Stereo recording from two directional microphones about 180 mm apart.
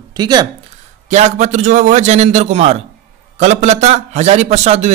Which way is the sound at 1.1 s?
40° right (ahead or behind).